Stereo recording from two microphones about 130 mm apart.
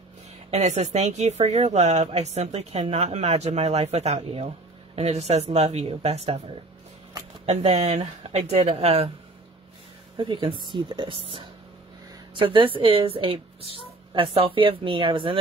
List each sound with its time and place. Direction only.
0.5 s a woman's voice: 60° right (ahead or behind)
8.3 s a woman's voice: 60° right (ahead or behind)
8.5 s a woman's voice: 45° right (ahead or behind)
10.1 s speech: 40° right (ahead or behind)
12.4 s a woman's voice: 40° right (ahead or behind)